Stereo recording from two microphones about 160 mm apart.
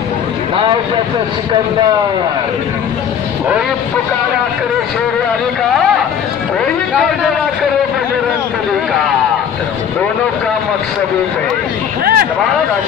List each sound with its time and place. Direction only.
12.0 s speech: 70° right (ahead or behind)